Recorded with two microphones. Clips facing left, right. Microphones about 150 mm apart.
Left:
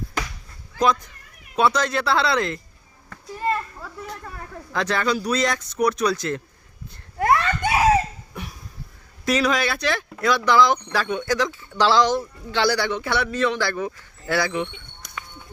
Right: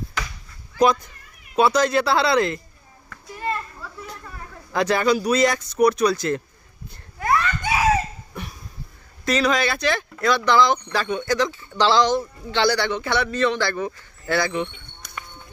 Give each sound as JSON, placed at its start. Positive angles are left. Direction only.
{"t": 1.5, "sound": "a man's voice", "side_deg": -5}
{"t": 4.7, "sound": "a man's voice", "side_deg": -10}
{"t": 7.2, "sound": "a sound", "side_deg": 60}
{"t": 9.2, "sound": "a man's voice", "side_deg": 5}